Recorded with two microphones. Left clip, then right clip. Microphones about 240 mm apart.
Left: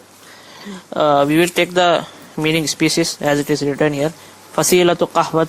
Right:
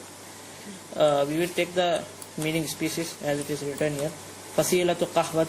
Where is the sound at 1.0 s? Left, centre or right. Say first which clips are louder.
Left 9 dB; left.